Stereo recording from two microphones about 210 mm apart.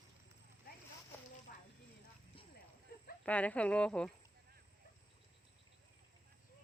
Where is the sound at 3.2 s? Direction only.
5° left (ahead or behind).